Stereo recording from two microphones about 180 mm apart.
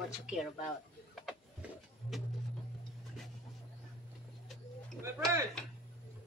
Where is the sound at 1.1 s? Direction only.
Centre (ahead or behind).